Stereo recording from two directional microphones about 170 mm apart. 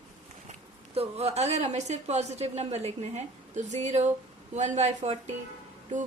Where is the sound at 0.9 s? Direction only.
40° right (ahead or behind).